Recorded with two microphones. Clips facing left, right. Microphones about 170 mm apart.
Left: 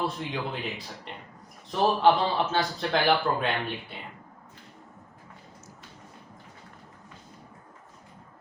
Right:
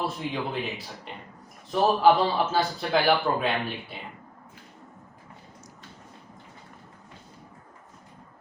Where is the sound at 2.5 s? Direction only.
Centre (ahead or behind).